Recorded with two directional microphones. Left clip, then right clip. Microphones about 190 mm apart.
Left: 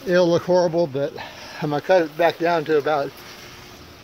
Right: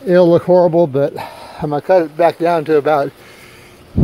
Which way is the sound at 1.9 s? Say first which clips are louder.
Right 6 dB; 25° right (ahead or behind).